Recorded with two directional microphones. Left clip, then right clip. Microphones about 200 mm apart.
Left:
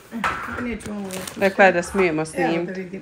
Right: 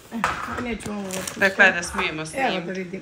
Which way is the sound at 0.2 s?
5° right (ahead or behind).